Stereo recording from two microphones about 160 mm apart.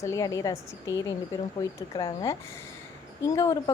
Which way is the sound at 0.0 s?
20° left (ahead or behind).